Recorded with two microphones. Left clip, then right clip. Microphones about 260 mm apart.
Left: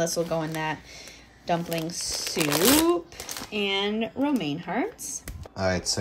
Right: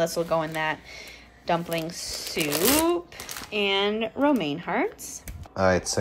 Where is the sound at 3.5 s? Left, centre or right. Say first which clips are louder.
Right 3 dB; centre.